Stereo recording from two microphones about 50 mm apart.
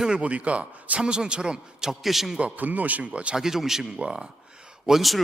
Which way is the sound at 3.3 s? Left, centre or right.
Centre.